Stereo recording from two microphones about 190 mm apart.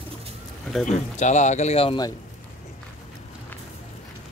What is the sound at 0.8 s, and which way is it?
Speech, 40° left (ahead or behind).